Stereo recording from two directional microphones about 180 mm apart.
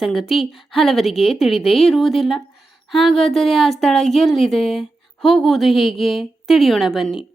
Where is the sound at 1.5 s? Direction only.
35° left (ahead or behind).